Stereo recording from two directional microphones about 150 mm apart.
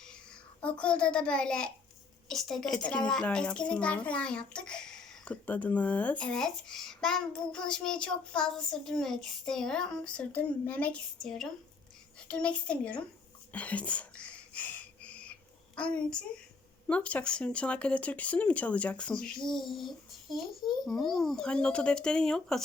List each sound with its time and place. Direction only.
0.6 s a child's voice: 10° left (ahead or behind)
13.5 s a sound: 10° left (ahead or behind)
15.7 s a child's voice: 5° left (ahead or behind)
20.3 s a child's voice: 30° left (ahead or behind)
20.8 s a child's voice: centre (ahead or behind)